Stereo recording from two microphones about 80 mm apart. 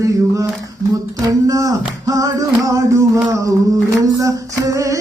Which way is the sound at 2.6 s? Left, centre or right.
Right.